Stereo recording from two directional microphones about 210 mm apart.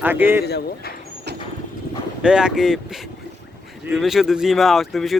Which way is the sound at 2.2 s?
5° right (ahead or behind).